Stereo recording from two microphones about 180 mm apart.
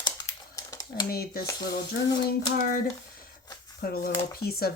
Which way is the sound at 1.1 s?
60° left (ahead or behind).